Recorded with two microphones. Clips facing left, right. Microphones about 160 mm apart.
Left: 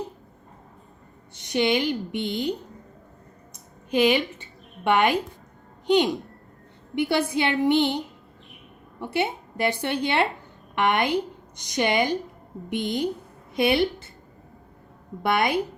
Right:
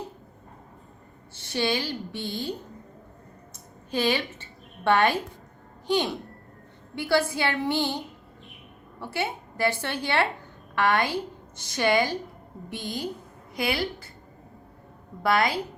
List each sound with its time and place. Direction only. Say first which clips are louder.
1.4 s a woman's voice: left 5 dB; 15° left (ahead or behind)
3.9 s a woman's voice: left 5 dB; 20° left (ahead or behind)
15.2 s a woman's voice: left 1 dB; 20° left (ahead or behind)